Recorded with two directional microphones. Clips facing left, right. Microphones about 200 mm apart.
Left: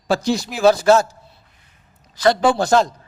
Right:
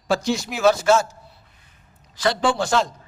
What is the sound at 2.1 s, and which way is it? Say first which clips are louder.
Speech: left 5 dB; 40° left (ahead or behind).